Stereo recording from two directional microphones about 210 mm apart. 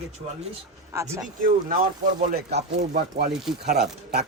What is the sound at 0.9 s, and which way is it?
Speech, 15° right (ahead or behind).